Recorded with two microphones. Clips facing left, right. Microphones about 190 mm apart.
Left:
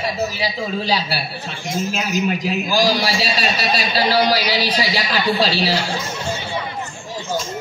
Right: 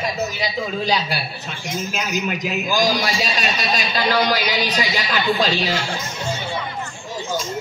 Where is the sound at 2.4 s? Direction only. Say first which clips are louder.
Left 2 dB; 35° left (ahead or behind).